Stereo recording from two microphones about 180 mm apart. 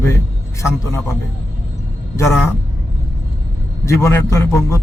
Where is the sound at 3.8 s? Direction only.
15° left (ahead or behind).